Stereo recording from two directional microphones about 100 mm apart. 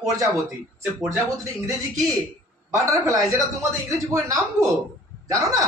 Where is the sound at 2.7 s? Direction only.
35° right (ahead or behind).